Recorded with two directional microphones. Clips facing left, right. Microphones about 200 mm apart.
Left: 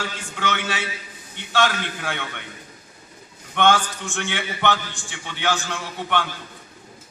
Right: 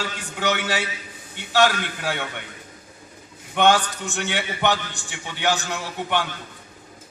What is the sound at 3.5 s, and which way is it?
A man's voice, 15° right (ahead or behind).